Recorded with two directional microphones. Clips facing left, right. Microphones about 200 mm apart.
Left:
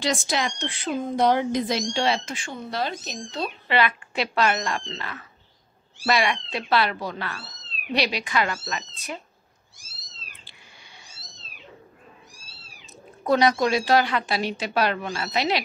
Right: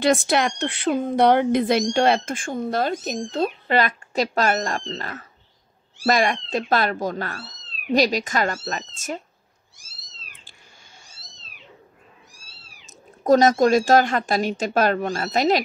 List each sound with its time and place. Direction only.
0.0 s speech: 60° right (ahead or behind); by 9.2 s 45° right (ahead or behind)
13.2 s speech: 45° right (ahead or behind)